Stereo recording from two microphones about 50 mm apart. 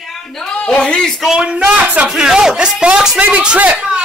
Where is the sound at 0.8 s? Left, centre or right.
Centre.